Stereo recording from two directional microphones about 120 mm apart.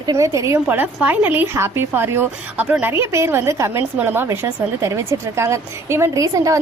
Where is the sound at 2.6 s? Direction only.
10° right (ahead or behind).